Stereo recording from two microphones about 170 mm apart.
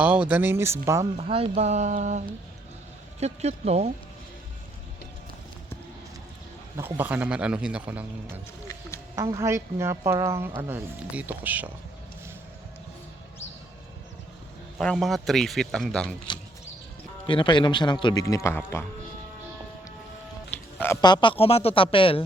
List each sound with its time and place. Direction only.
0.0 s speech: 10° right (ahead or behind)
1.3 s a sound: 35° right (ahead or behind)
3.2 s speech: 40° right (ahead or behind)
6.7 s speech: 15° right (ahead or behind)
9.1 s speech: 20° right (ahead or behind)
14.8 s speech: centre (ahead or behind)
17.2 s a man's voice: 30° left (ahead or behind); by 18.9 s 15° left (ahead or behind)
20.7 s speech: 15° left (ahead or behind)
21.0 s speech: 25° left (ahead or behind)